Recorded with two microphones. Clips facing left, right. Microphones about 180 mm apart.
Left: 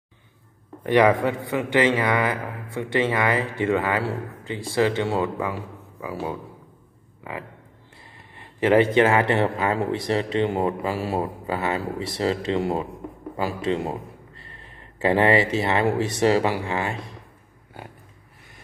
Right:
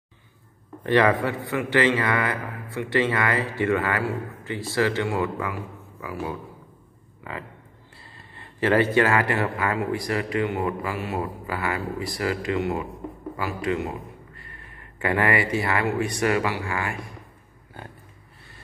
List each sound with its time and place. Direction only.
0.8 s a man's voice: 15° left (ahead or behind)
8.4 s a man's voice: 20° left (ahead or behind)